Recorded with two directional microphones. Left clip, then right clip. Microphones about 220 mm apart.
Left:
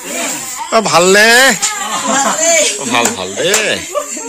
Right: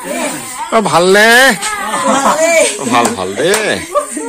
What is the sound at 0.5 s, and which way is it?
Speech, 15° left (ahead or behind).